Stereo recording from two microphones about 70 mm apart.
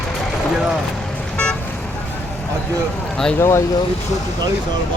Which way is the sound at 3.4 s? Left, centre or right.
Left.